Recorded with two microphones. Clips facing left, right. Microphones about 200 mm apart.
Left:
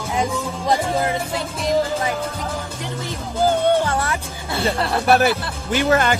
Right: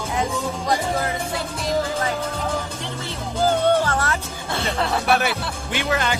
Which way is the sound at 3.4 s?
15° left (ahead or behind).